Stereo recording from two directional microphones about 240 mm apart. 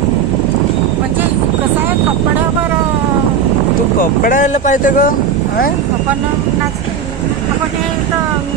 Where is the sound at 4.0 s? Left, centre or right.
Left.